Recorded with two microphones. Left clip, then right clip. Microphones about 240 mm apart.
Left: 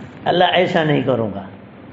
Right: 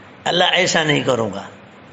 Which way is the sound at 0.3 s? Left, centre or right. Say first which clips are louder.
Left 1 dB; right.